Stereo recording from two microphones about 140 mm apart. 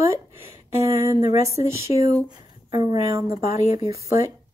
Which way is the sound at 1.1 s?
25° right (ahead or behind).